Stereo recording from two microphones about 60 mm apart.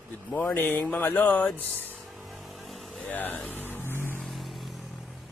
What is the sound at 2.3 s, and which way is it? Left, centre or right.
Vehicle, centre.